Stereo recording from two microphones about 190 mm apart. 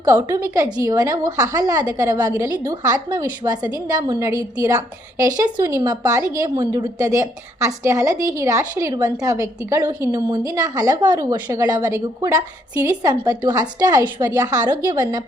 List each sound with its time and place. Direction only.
0.0 s a woman's voice: 15° right (ahead or behind)